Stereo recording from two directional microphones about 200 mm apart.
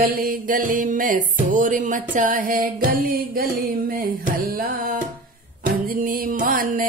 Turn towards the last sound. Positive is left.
turn(degrees=-45)  # may be behind; listen again after turning